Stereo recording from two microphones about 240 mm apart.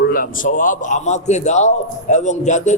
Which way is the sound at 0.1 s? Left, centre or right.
Left.